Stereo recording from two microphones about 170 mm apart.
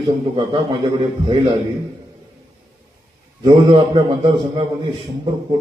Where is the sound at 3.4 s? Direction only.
25° right (ahead or behind).